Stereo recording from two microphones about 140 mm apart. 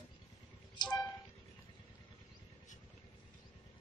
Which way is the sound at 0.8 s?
30° left (ahead or behind).